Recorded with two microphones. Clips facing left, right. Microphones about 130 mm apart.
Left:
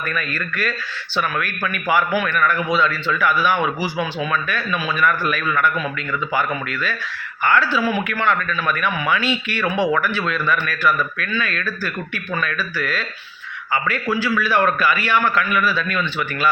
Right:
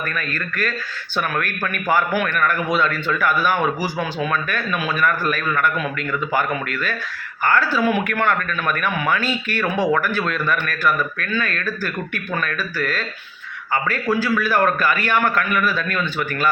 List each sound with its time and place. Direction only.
0.1 s a man's voice: 45° right (ahead or behind)